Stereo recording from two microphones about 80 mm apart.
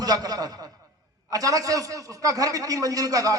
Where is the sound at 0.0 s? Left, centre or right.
Right.